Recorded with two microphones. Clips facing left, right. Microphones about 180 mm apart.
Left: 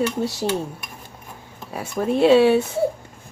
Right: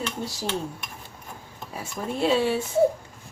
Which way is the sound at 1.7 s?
65° left (ahead or behind).